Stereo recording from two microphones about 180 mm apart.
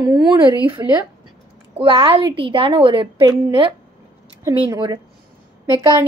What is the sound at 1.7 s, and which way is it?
A woman's voice, 30° right (ahead or behind).